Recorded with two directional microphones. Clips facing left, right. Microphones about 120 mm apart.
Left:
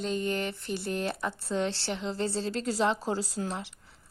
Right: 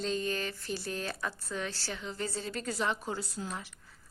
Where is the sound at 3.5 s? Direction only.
25° left (ahead or behind).